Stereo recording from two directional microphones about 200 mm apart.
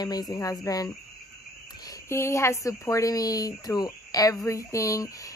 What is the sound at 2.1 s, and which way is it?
Speech, 15° left (ahead or behind).